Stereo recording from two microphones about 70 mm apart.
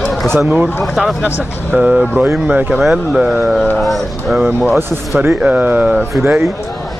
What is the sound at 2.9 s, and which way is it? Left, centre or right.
Speech, centre.